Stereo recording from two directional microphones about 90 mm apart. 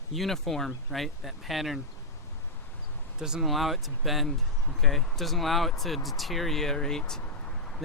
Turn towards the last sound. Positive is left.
turn(degrees=5)  # may be behind; listen again after turning